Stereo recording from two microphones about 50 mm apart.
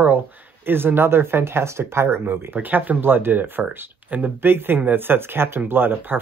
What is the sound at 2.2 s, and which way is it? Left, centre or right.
Speech, right.